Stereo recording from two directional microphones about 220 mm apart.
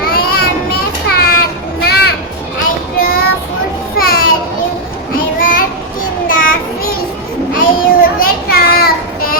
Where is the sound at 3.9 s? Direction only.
45° left (ahead or behind).